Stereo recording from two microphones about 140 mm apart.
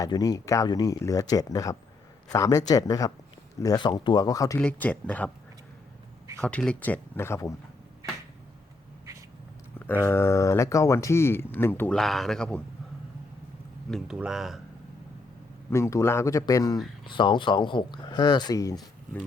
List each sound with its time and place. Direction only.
0.0 s speech: 25° left (ahead or behind)
4.6 s speech: 10° left (ahead or behind)
6.4 s speech: 5° left (ahead or behind)
9.7 s speech: 15° left (ahead or behind)
11.9 s speech: centre (ahead or behind)
13.9 s speech: 5° right (ahead or behind)
15.7 s speech: 20° left (ahead or behind)
17.1 s speech: 35° left (ahead or behind)